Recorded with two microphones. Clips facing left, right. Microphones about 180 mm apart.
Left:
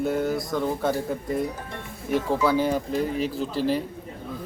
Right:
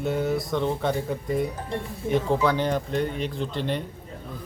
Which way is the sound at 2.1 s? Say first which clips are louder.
Right 1 dB; 15° right (ahead or behind).